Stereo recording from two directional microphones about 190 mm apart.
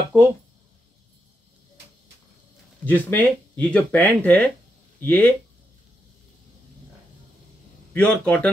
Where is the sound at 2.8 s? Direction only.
10° left (ahead or behind).